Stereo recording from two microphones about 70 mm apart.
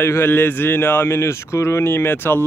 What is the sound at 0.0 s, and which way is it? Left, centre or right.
Speech, left.